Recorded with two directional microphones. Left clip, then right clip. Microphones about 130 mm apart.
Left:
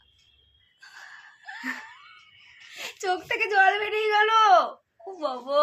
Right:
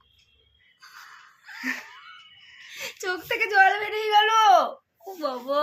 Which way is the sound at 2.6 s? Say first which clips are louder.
Left 1 dB; 25° left (ahead or behind).